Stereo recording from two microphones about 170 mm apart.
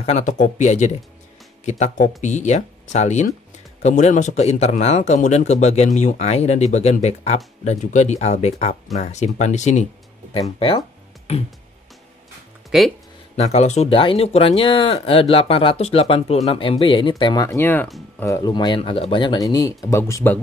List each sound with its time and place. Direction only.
0.0 s speech: 45° left (ahead or behind)
11.3 s speech: 35° left (ahead or behind)
12.7 s speech: centre (ahead or behind)
13.4 s speech: 40° left (ahead or behind); by 20.3 s 15° left (ahead or behind)